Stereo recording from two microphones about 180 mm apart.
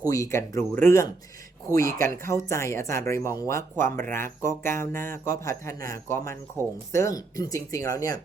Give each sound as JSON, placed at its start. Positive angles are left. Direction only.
{"t": 0.0, "sound": "speech", "side_deg": 15}
{"t": 1.8, "sound": "speech", "side_deg": -50}
{"t": 2.2, "sound": "speech", "side_deg": 15}
{"t": 6.6, "sound": "speech", "side_deg": -15}
{"t": 6.9, "sound": "speech", "side_deg": 15}